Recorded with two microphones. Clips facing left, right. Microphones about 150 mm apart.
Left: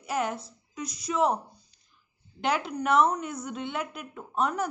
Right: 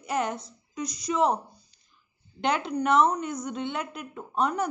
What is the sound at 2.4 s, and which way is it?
A woman's voice, 5° left (ahead or behind).